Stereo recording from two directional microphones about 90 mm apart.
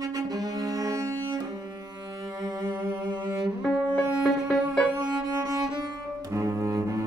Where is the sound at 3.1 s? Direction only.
50° right (ahead or behind).